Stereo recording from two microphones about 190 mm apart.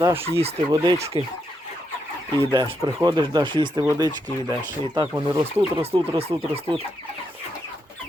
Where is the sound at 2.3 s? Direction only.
25° right (ahead or behind).